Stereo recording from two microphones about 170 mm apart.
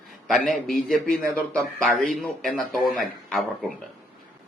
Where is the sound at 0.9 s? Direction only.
5° left (ahead or behind).